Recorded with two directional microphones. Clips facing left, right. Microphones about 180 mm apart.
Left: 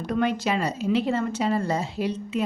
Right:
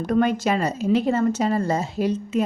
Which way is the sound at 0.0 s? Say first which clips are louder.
Right 4 dB; 45° right (ahead or behind).